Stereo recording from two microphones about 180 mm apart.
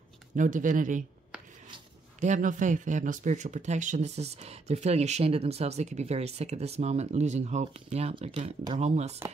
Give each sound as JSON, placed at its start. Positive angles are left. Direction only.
{"t": 0.4, "sound": "speech", "side_deg": -45}
{"t": 2.1, "sound": "speech", "side_deg": -40}